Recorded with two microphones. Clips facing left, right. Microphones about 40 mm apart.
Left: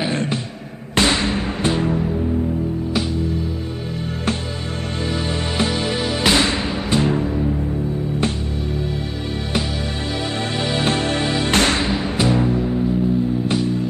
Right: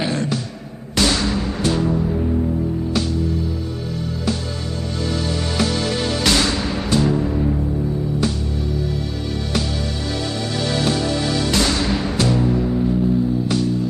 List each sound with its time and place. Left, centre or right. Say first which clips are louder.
0.1 s music: even; left
5.6 s music: even; left
10.6 s music: even; left
11.9 s music: even; centre
13.5 s music: even; left